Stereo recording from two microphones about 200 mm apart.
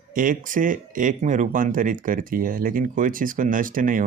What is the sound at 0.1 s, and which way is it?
Speech, 45° right (ahead or behind).